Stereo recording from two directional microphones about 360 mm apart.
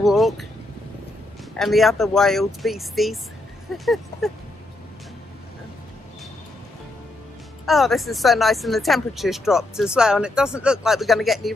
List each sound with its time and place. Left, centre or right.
0.0 s speech: centre
1.6 s speech: centre
3.7 s a sound: centre
7.6 s speech: centre